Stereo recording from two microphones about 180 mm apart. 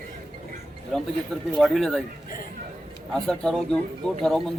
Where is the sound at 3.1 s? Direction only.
5° left (ahead or behind).